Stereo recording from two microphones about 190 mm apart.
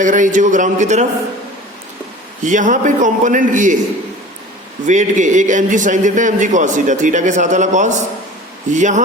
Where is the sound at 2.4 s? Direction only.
40° right (ahead or behind).